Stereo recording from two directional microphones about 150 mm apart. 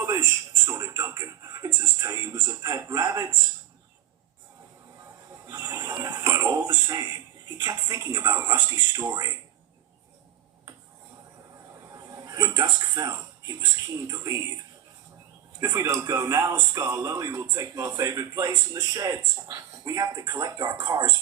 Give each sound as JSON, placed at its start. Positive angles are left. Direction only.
{"t": 0.0, "sound": "television", "side_deg": -20}
{"t": 0.7, "sound": "music", "side_deg": -25}
{"t": 5.5, "sound": "television", "side_deg": -25}
{"t": 7.6, "sound": "music", "side_deg": -25}
{"t": 11.9, "sound": "a sound", "side_deg": -25}
{"t": 14.1, "sound": "music", "side_deg": -20}
{"t": 15.6, "sound": "music", "side_deg": -25}